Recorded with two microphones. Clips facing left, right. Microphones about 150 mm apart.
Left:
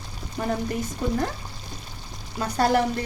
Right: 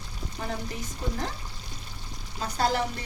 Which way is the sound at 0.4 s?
60° left (ahead or behind).